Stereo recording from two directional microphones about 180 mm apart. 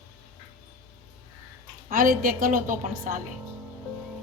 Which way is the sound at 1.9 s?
50° right (ahead or behind).